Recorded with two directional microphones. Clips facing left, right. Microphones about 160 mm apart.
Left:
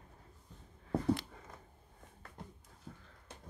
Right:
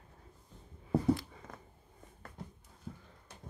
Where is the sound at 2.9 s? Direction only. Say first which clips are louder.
Right 5 dB; 5° right (ahead or behind).